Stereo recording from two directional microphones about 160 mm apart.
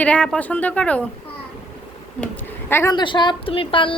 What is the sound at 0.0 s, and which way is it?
A woman's voice, 5° left (ahead or behind).